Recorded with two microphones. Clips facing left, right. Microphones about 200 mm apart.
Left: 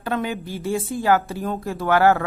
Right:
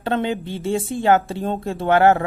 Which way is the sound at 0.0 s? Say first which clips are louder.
Right 3 dB; 25° right (ahead or behind).